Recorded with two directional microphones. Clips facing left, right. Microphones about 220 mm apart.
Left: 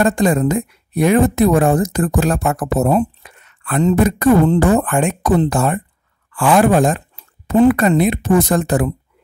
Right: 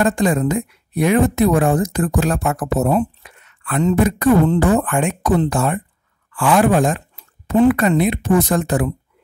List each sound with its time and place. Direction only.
0.0 s a woman's voice: 40° left (ahead or behind)